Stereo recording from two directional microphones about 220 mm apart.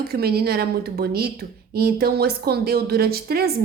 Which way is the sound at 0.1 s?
45° right (ahead or behind).